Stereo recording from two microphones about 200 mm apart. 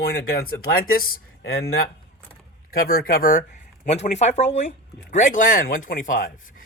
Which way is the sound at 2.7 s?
50° left (ahead or behind).